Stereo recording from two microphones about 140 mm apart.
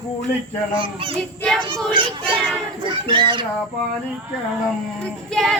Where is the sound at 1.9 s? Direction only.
35° right (ahead or behind).